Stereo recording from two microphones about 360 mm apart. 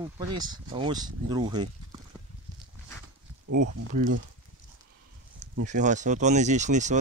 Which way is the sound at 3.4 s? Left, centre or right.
Right.